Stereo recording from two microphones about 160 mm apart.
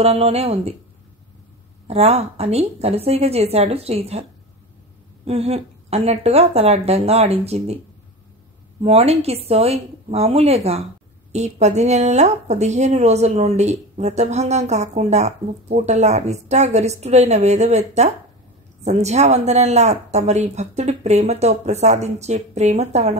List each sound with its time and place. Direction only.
0.0 s a woman's voice: 40° right (ahead or behind)
1.9 s a woman's voice: 40° right (ahead or behind)
8.8 s a woman's voice: 40° right (ahead or behind)